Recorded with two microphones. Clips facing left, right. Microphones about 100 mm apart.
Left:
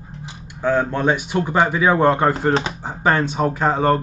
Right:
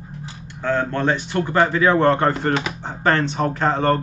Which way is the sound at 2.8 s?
10° left (ahead or behind).